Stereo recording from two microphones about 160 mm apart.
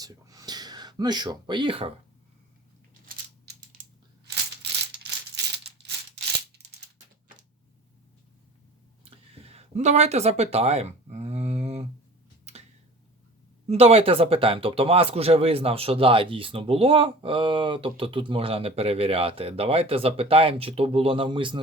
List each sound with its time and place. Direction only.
0.0 s a sound: 20° right (ahead or behind)
3.1 s coin: 90° right
5.6 s rattle: 90° right
9.0 s speech: 40° right (ahead or behind)
13.7 s speech: 40° right (ahead or behind)